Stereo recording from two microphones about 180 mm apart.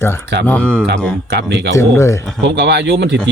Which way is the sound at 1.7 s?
15° left (ahead or behind).